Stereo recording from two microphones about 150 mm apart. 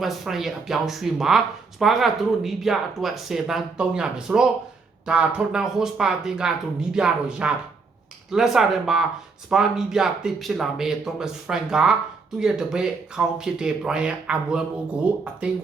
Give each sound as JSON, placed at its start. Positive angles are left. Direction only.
{"t": 0.0, "sound": "speech", "side_deg": 0}